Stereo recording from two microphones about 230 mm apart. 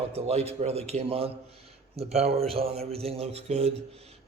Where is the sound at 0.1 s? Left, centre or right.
Right.